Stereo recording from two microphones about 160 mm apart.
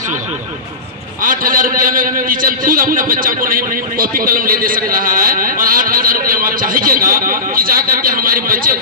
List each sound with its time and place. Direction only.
1.2 s a man's voice: 60° right (ahead or behind)